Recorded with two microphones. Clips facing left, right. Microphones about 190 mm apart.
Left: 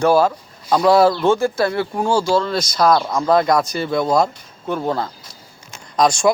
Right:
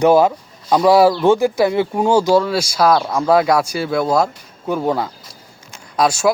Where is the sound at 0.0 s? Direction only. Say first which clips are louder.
Right 3 dB; 20° right (ahead or behind).